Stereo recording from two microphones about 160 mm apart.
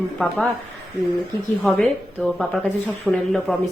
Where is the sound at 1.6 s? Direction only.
5° left (ahead or behind).